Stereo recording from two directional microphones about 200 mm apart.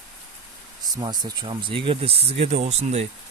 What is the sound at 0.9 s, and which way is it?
Speech, 20° right (ahead or behind).